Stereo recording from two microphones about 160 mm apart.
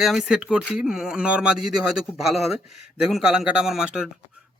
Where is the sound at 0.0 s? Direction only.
Centre (ahead or behind).